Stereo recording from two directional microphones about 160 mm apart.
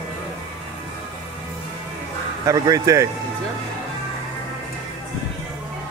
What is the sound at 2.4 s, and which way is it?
Speech, 20° right (ahead or behind).